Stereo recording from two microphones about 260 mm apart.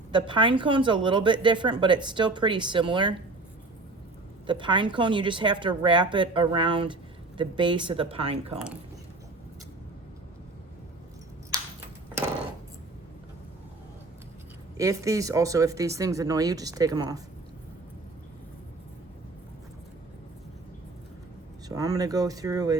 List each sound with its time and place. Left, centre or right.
0.1 s speech: centre
4.4 s a woman's voice: centre
8.5 s speech: centre
14.8 s speech: centre
21.7 s speech: centre